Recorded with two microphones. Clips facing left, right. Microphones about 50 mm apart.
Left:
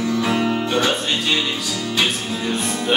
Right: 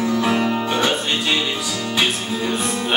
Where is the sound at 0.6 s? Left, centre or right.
Centre.